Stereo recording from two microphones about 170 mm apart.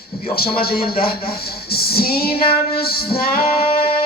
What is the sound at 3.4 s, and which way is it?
Female singing, 35° left (ahead or behind).